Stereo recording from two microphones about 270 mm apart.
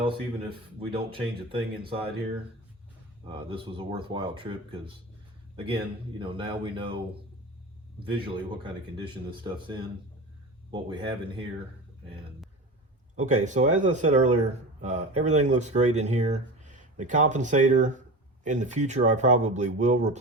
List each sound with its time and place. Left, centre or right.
0.0 s speech: centre
3.2 s speech: centre
8.0 s speech: centre
13.1 s speech: right